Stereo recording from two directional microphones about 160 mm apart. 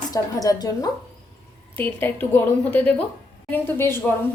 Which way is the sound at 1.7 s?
10° left (ahead or behind).